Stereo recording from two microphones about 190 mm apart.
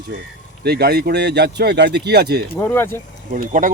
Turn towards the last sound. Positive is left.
turn(degrees=-45)  # may be behind; listen again after turning